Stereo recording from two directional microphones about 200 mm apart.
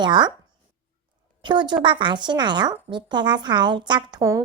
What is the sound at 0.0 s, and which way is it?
Speech, 20° right (ahead or behind).